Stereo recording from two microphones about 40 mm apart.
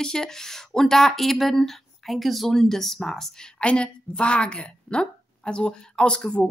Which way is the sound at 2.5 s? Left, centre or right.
Centre.